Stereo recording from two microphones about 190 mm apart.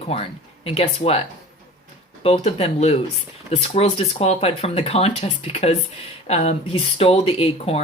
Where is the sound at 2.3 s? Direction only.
35° left (ahead or behind).